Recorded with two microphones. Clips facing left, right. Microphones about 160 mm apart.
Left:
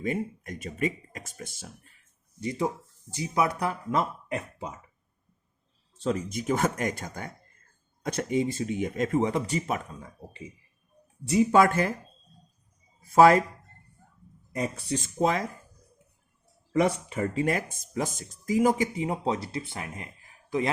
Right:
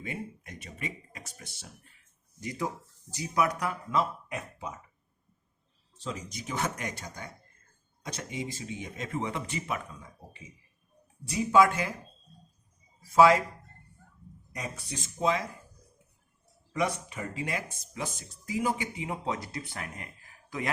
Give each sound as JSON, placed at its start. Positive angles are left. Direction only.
{"t": 0.0, "sound": "speech", "side_deg": 45}
{"t": 2.4, "sound": "speech", "side_deg": 30}
{"t": 3.9, "sound": "speech", "side_deg": 60}
{"t": 6.0, "sound": "speech", "side_deg": 60}
{"t": 11.3, "sound": "speech", "side_deg": 55}
{"t": 13.1, "sound": "speech", "side_deg": 50}
{"t": 14.5, "sound": "speech", "side_deg": 55}
{"t": 16.7, "sound": "speech", "side_deg": 55}